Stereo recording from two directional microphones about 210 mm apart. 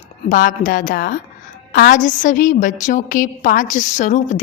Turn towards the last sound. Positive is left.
turn(degrees=35)  # may be behind; listen again after turning